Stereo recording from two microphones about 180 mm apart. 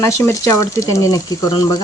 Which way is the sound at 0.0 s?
15° left (ahead or behind).